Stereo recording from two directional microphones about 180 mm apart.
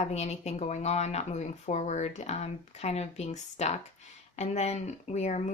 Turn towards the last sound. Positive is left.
turn(degrees=40)  # may be behind; listen again after turning